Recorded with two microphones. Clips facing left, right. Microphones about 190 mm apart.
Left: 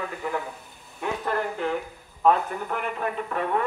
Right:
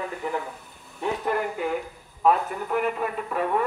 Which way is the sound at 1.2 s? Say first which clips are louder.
Even; 10° right (ahead or behind).